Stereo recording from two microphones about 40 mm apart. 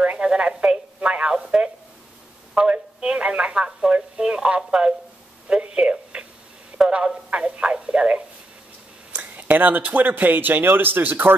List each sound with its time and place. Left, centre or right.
0.0 s telephone: right
3.0 s a sound: right
7.2 s telephone: right
9.1 s speech: right